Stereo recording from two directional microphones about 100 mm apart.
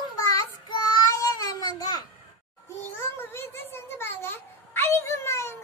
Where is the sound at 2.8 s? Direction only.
25° left (ahead or behind).